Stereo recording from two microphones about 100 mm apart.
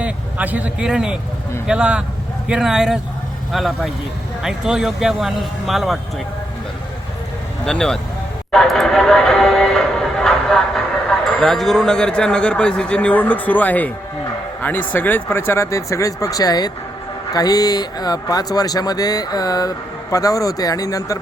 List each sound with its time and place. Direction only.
0.0 s speech: 15° right (ahead or behind)
7.6 s speech: 5° left (ahead or behind)
8.5 s music: centre (ahead or behind)
11.3 s a man's voice: centre (ahead or behind); by 21.2 s 35° left (ahead or behind)